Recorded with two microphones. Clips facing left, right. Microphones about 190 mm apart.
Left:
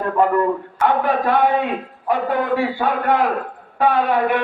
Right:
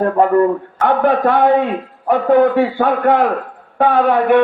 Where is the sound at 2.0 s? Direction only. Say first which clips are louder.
Right 8 dB; 55° right (ahead or behind).